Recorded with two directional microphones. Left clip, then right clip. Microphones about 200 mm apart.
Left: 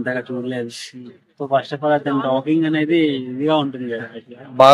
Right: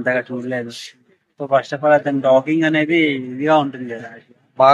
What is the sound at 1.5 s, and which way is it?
Speech, 20° left (ahead or behind).